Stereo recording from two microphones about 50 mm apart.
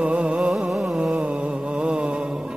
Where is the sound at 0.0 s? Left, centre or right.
Right.